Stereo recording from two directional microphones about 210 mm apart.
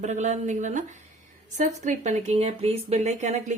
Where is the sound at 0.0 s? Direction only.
35° right (ahead or behind).